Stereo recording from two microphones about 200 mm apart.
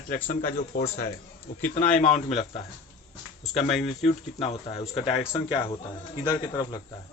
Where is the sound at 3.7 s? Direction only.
Centre (ahead or behind).